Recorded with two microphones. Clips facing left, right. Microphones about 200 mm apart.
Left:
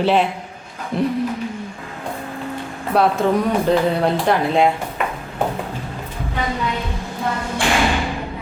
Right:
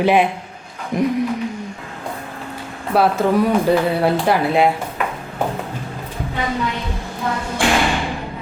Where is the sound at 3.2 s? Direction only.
Centre (ahead or behind).